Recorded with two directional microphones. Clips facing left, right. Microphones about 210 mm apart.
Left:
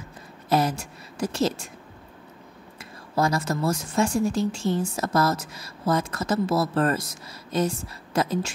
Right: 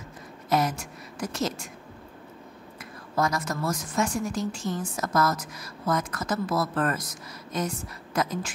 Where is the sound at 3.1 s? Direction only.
30° left (ahead or behind).